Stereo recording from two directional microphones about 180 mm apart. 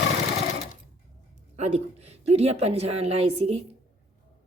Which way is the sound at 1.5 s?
40° right (ahead or behind).